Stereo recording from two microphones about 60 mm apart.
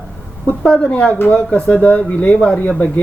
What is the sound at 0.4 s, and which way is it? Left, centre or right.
A woman's voice, left.